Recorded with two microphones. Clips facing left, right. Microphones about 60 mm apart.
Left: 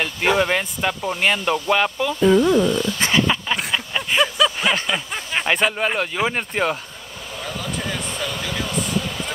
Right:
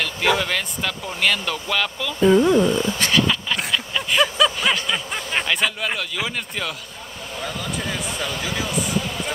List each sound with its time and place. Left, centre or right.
0.0 s speech: left
2.1 s speech: centre
3.0 s speech: left
3.5 s a sound: centre
5.5 s speech: left
7.4 s speech: centre